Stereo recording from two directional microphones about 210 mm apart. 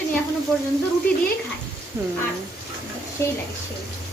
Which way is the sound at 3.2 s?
10° left (ahead or behind).